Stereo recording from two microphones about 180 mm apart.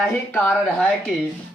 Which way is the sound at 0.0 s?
10° left (ahead or behind).